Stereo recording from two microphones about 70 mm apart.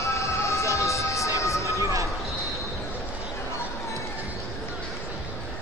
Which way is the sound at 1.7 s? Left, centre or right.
Right.